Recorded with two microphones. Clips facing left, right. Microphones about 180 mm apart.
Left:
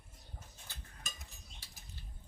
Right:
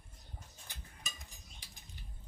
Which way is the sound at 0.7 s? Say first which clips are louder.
Right 1 dB; 15° right (ahead or behind).